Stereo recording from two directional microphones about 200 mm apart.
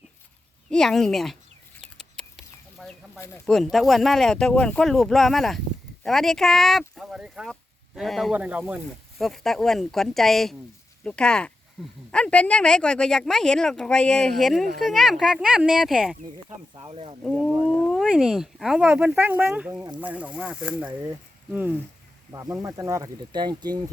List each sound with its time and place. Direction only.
0.7 s speech: centre (ahead or behind)
2.0 s a sound: centre (ahead or behind)
3.4 s speech: centre (ahead or behind)
16.7 s speech: 25° right (ahead or behind)
17.9 s speech: centre (ahead or behind); by 23.8 s 20° right (ahead or behind)